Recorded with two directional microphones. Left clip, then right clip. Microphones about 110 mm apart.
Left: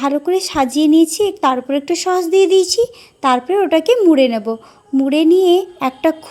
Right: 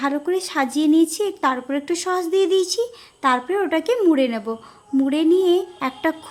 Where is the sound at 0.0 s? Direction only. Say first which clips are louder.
Left 6 dB; 35° left (ahead or behind).